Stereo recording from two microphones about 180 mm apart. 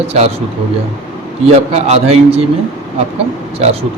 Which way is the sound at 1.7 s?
35° right (ahead or behind).